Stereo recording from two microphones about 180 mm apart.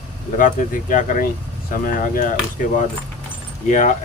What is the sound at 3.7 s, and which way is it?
Speech, 40° left (ahead or behind).